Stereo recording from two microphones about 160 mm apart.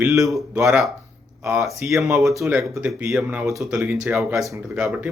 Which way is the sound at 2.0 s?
15° right (ahead or behind).